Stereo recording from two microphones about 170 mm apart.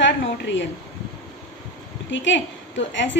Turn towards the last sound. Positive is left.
turn(degrees=90)